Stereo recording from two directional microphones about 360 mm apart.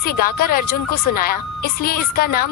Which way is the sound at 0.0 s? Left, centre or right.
Left.